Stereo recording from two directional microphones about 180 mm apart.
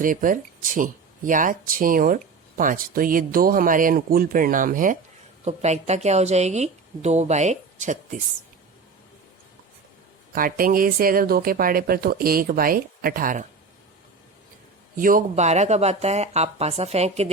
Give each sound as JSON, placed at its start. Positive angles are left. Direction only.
{"t": 0.0, "sound": "a woman's voice", "side_deg": -50}
{"t": 10.3, "sound": "speech", "side_deg": -50}
{"t": 14.9, "sound": "a woman's voice", "side_deg": -50}